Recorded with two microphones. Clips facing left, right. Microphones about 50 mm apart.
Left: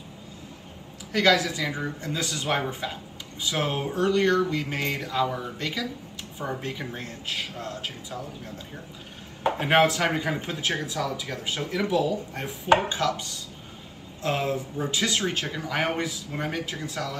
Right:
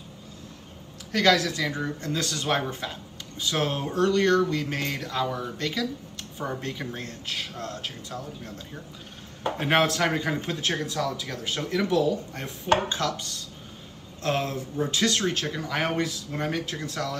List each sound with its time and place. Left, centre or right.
1.1 s speech: centre
9.4 s speech: centre